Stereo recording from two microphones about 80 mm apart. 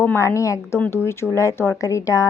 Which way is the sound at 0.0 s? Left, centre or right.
Left.